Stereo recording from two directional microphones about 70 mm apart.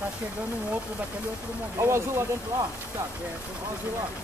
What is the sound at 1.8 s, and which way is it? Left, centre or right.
Speech, right.